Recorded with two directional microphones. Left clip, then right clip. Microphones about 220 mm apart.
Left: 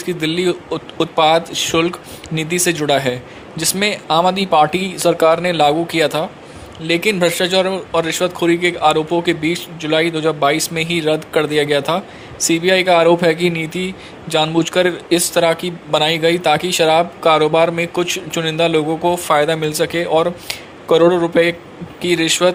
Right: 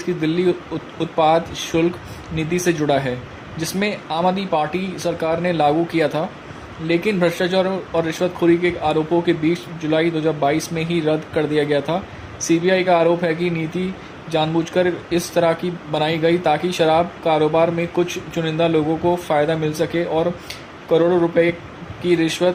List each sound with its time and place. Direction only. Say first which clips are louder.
0.0 s speech: left 1 dB; 45° left (ahead or behind)